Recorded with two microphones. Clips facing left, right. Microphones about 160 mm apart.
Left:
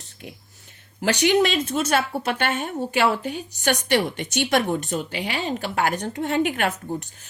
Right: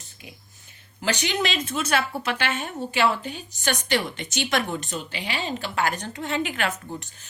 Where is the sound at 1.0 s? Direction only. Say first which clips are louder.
Left 7 dB; 55° left (ahead or behind).